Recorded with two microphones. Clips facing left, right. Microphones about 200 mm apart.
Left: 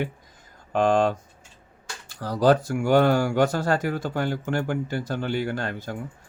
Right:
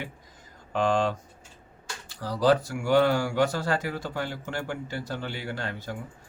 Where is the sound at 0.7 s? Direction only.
50° left (ahead or behind).